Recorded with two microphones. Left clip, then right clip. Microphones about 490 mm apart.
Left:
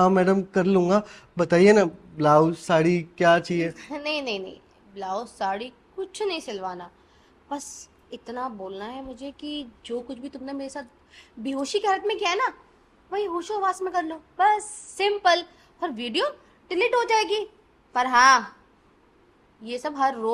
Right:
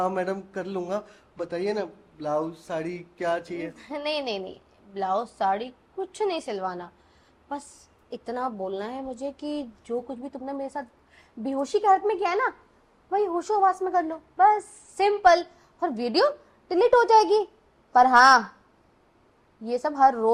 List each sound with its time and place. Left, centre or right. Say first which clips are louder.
0.0 s a man's voice: left 7 dB; left
3.8 s a woman's voice: even; right
8.1 s a woman's voice: right 2 dB; right
10.1 s a woman's voice: right 1 dB; centre
19.6 s a woman's voice: right 4 dB; right